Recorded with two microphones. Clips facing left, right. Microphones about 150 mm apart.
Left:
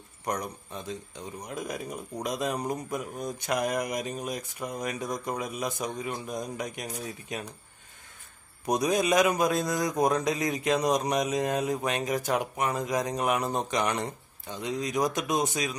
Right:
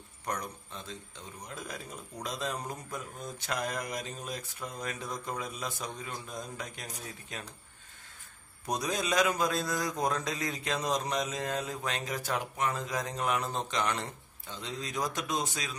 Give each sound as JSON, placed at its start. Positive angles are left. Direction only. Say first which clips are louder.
{"t": 0.2, "sound": "a man's voice", "louder": "left 5 dB", "side_deg": 15}
{"t": 8.6, "sound": "a man's voice", "louder": "left 7 dB", "side_deg": 20}